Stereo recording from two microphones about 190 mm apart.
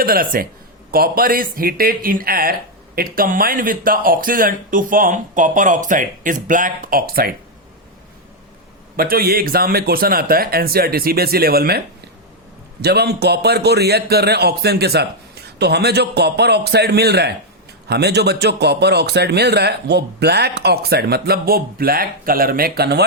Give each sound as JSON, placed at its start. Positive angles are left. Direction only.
{"t": 0.0, "sound": "speech", "side_deg": -50}
{"t": 9.0, "sound": "speech", "side_deg": -50}
{"t": 12.8, "sound": "a man's voice", "side_deg": -60}